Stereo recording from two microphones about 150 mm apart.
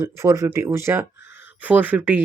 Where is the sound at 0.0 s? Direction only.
20° right (ahead or behind).